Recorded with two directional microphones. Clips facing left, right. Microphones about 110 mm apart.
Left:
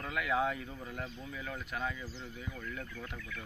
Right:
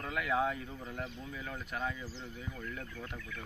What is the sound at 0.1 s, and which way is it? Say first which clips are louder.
Speech: even; 25° right (ahead or behind).